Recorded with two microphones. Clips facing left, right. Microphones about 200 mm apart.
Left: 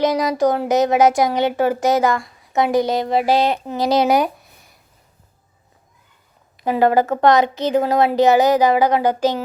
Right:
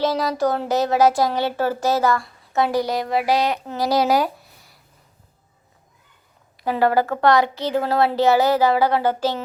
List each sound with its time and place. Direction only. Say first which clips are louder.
0.0 s speech: left 4 dB; 20° left (ahead or behind)
6.6 s a woman's voice: left 3 dB; 20° left (ahead or behind)